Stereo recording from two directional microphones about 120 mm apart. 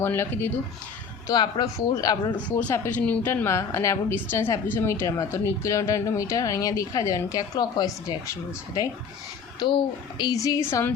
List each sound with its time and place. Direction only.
0.0 s speech: 20° left (ahead or behind)
1.3 s speech: 35° left (ahead or behind)
2.6 s speech: 25° left (ahead or behind)
9.6 s speech: 40° left (ahead or behind); by 10.9 s 20° left (ahead or behind)